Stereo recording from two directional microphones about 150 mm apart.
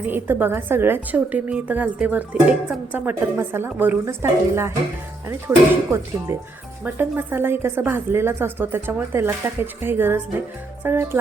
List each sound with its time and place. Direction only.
0.0 s a woman's voice: 15° right (ahead or behind)